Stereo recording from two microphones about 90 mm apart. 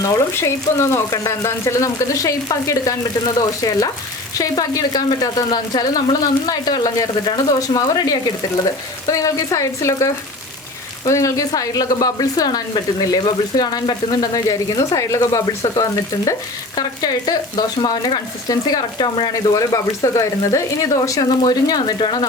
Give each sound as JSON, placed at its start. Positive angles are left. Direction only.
{"t": 0.0, "sound": "speech", "side_deg": 30}
{"t": 19.3, "sound": "speech", "side_deg": 40}